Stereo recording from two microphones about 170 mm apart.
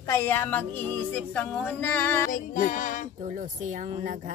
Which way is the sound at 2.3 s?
50° left (ahead or behind).